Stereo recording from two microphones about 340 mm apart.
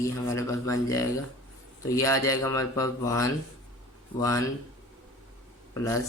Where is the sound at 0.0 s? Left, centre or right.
Centre.